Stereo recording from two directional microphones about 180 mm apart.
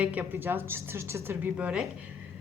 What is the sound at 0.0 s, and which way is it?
A woman's voice, 10° right (ahead or behind).